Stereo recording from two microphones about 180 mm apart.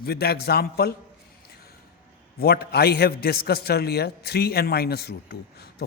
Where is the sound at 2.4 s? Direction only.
60° left (ahead or behind).